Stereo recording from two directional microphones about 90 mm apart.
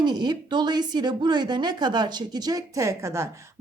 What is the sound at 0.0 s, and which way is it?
Speech, 50° right (ahead or behind).